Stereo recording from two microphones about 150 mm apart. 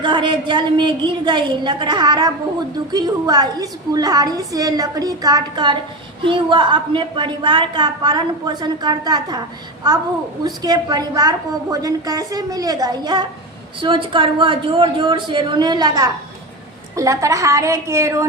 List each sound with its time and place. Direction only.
0.0 s a woman's voice: 30° right (ahead or behind)
10.4 s a woman's voice: 25° right (ahead or behind)